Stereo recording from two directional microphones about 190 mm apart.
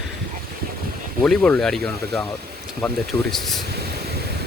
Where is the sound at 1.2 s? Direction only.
5° left (ahead or behind).